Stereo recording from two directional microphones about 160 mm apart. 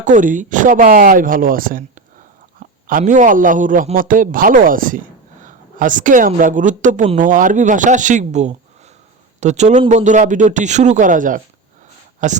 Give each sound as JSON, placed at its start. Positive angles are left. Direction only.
{"t": 0.0, "sound": "a man's voice", "side_deg": -55}